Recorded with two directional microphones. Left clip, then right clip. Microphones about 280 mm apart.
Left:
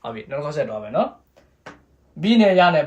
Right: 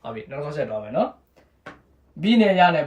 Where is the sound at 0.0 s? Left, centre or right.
Centre.